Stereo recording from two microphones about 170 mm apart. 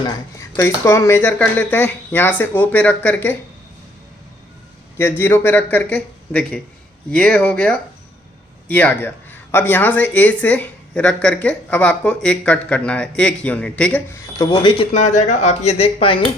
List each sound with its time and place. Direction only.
0.0 s speech: 20° left (ahead or behind)
4.9 s speech: 10° left (ahead or behind)
14.3 s speech: 25° left (ahead or behind)